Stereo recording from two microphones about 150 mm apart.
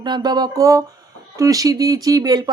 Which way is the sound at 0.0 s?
30° right (ahead or behind).